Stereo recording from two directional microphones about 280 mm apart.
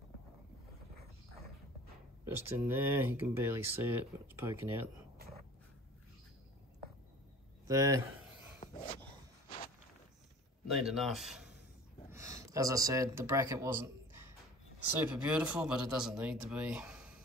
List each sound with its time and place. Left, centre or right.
2.2 s speech: centre
7.6 s speech: centre
8.5 s a sound: left
10.7 s a man's voice: centre